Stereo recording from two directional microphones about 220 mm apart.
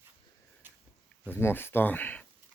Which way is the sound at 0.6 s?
10° right (ahead or behind).